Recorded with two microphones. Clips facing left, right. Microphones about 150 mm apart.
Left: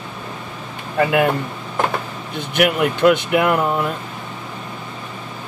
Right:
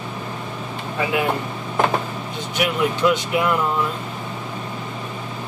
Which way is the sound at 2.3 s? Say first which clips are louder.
Left 5 dB; 60° left (ahead or behind).